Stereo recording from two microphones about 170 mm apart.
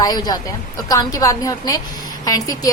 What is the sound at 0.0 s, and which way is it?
A woman's voice, 25° left (ahead or behind).